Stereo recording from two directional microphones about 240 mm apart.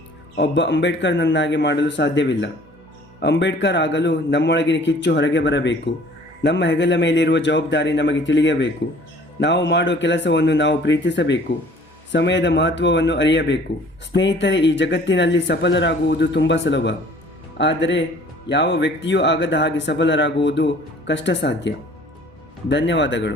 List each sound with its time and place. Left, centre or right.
0.3 s speech: left
22.7 s speech: left